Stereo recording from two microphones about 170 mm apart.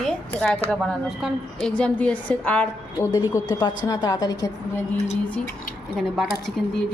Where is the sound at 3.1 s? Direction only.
20° left (ahead or behind).